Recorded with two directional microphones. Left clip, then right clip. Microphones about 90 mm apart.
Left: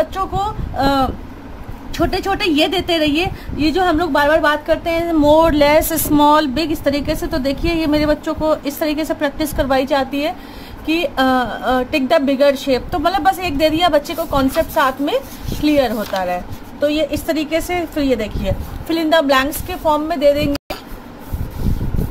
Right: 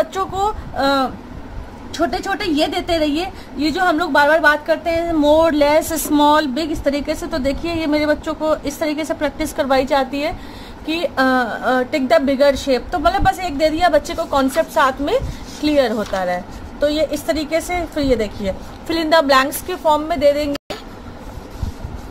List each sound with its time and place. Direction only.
0.0 s a sound: 20° right (ahead or behind)
0.7 s a woman's voice: 5° right (ahead or behind)
9.4 s a woman's voice: 15° right (ahead or behind)
11.2 s a woman's voice: 5° right (ahead or behind)
14.3 s a woman's voice: 25° right (ahead or behind)
18.9 s a woman's voice: 30° right (ahead or behind)